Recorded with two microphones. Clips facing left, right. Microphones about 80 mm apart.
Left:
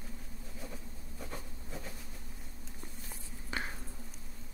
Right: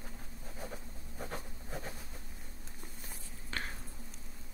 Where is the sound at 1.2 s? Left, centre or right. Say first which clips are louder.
Right 3 dB; right.